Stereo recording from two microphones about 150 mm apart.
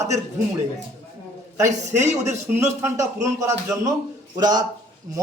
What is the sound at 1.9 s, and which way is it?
A man's voice, 15° right (ahead or behind).